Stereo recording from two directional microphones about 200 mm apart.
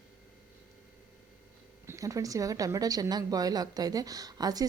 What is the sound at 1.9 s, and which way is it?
Speech, 15° right (ahead or behind).